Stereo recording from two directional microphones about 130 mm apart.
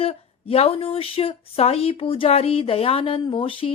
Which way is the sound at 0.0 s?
50° left (ahead or behind).